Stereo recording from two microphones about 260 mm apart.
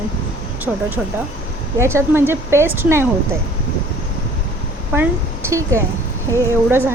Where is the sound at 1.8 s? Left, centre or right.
Centre.